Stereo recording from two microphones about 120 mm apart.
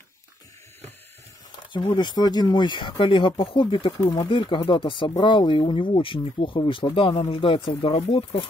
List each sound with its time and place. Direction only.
1.7 s speech: 45° left (ahead or behind)